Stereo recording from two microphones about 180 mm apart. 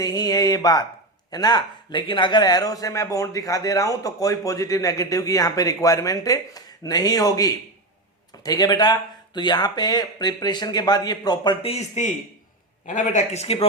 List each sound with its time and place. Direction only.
0.0 s speech: 20° left (ahead or behind)